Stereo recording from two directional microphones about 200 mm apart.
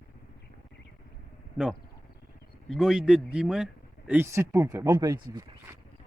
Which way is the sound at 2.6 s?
Centre (ahead or behind).